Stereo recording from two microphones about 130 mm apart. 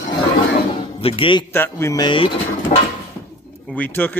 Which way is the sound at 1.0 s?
45° left (ahead or behind).